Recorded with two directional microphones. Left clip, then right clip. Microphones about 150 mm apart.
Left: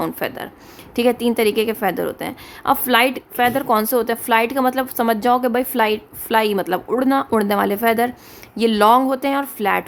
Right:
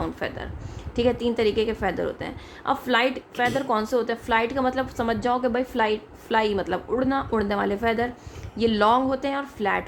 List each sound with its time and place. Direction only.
0.0 s a woman's voice: 45° left (ahead or behind)